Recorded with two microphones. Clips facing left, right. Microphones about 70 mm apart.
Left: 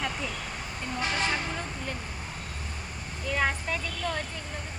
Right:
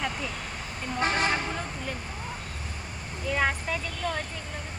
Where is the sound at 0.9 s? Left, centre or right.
Right.